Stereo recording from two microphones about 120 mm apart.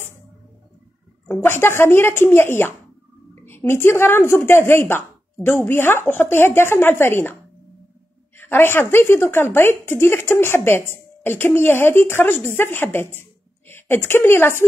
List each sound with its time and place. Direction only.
1.4 s a woman's voice: 20° left (ahead or behind)
8.4 s a woman's voice: 20° left (ahead or behind)